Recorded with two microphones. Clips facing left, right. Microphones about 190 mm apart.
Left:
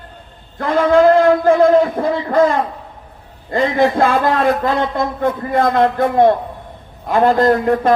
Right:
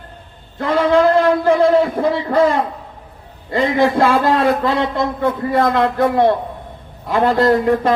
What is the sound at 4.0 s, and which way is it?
Speech, 50° left (ahead or behind).